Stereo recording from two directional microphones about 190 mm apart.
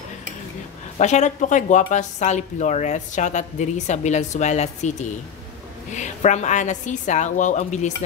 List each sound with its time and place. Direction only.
0.9 s speech: 40° left (ahead or behind)